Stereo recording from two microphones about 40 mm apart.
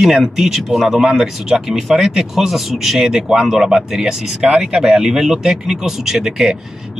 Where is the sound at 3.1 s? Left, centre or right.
Centre.